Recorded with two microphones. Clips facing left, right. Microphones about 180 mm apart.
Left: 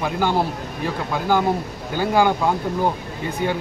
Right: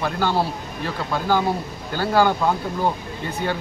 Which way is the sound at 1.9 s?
15° left (ahead or behind).